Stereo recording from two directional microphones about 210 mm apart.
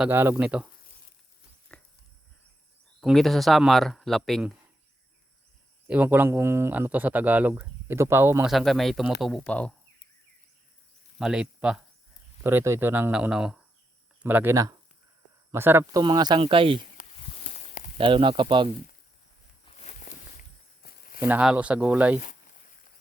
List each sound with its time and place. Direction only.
0.0 s speech: 10° right (ahead or behind)
1.7 s dog: 5° left (ahead or behind)
3.0 s speech: centre (ahead or behind)
5.9 s speech: 10° right (ahead or behind)
8.4 s speech: centre (ahead or behind)
11.2 s speech: 5° right (ahead or behind); by 16.8 s 25° right (ahead or behind)
17.0 s a sound: 30° left (ahead or behind)
17.9 s speech: 25° right (ahead or behind)
19.7 s walk: 35° left (ahead or behind)
21.2 s speech: 10° right (ahead or behind)